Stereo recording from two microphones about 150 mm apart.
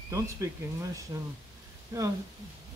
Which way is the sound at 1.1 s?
20° right (ahead or behind).